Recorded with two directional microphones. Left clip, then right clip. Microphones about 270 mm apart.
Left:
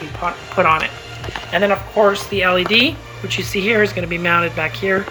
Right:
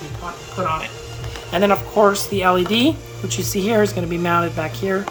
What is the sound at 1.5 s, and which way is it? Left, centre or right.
Speech, right.